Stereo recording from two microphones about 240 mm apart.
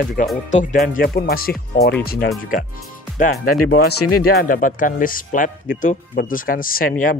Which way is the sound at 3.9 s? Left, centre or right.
Left.